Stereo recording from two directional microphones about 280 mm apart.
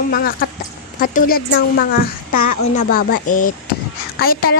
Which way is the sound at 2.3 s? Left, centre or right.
Left.